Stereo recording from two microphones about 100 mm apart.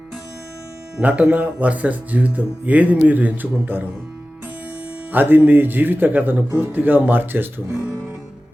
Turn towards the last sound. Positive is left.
turn(degrees=-20)  # may be behind; listen again after turning